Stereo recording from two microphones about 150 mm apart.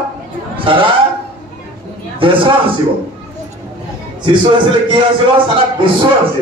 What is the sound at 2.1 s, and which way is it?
Speech, 35° right (ahead or behind).